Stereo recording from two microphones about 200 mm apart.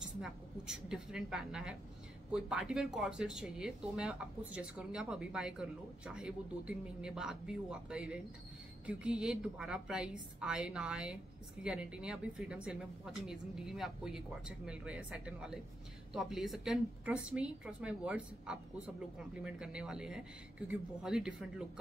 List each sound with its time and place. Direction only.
0.2 s speech: 5° right (ahead or behind)